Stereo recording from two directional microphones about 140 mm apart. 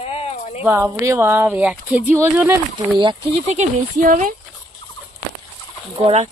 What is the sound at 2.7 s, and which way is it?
Speech, 35° right (ahead or behind).